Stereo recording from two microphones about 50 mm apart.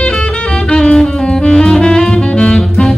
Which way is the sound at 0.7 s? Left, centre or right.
Centre.